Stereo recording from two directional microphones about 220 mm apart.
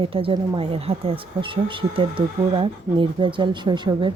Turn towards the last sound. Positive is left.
turn(degrees=-20)  # may be behind; listen again after turning